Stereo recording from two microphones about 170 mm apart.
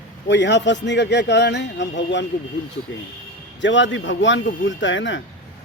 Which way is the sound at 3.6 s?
90° left.